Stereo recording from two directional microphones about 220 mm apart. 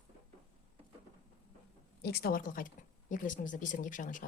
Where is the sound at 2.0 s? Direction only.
45° left (ahead or behind).